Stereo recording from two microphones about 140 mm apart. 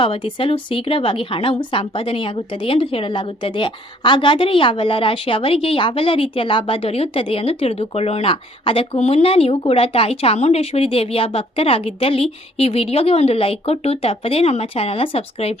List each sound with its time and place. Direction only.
0.0 s speech: 40° left (ahead or behind)